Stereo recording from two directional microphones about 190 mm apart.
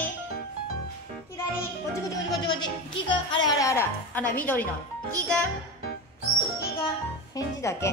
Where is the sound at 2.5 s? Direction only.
25° left (ahead or behind).